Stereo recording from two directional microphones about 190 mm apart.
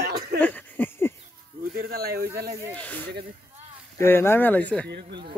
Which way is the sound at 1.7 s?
50° right (ahead or behind).